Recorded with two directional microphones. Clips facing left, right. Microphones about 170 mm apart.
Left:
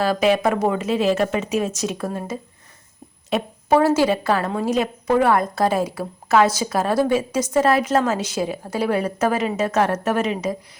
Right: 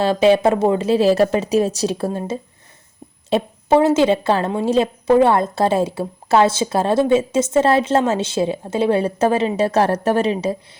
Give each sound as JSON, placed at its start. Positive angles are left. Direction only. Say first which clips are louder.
{"t": 0.0, "sound": "a woman's voice", "louder": "right 4 dB", "side_deg": -25}